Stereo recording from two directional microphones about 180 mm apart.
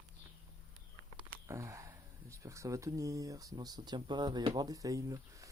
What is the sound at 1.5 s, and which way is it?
Speech, 15° right (ahead or behind).